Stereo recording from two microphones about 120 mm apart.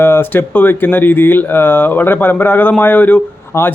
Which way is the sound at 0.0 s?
20° left (ahead or behind).